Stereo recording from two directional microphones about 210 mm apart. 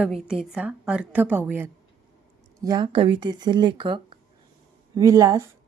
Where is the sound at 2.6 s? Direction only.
20° right (ahead or behind).